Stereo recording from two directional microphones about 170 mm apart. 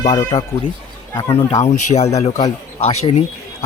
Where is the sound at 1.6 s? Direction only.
40° left (ahead or behind).